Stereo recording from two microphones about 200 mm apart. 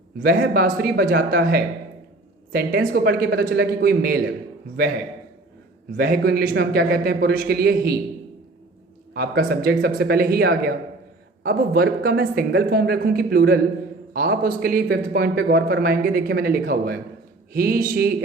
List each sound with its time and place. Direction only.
0.2 s a man's voice: 50° right (ahead or behind)
6.0 s a man's voice: 50° right (ahead or behind)
9.1 s a man's voice: 55° right (ahead or behind)